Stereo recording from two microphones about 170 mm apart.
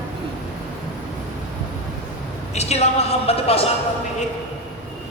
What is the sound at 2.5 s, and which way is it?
Speech, 40° left (ahead or behind).